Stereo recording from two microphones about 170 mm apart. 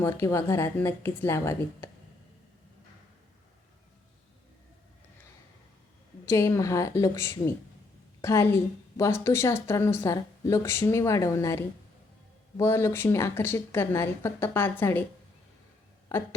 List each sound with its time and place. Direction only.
0.0 s a woman's voice: 15° left (ahead or behind)
6.2 s a woman's voice: 15° left (ahead or behind)